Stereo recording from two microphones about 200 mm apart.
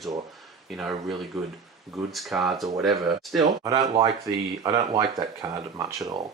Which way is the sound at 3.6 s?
20° right (ahead or behind).